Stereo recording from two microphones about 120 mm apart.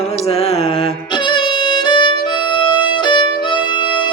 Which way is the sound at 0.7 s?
40° left (ahead or behind).